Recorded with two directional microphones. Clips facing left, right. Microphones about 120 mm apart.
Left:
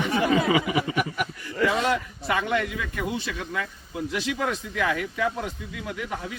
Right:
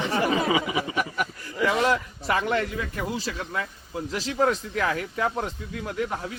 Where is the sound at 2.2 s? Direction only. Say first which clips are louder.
Right 1 dB; 40° right (ahead or behind).